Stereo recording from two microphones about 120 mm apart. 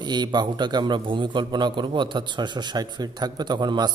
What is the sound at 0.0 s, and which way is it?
A man's voice, 35° right (ahead or behind).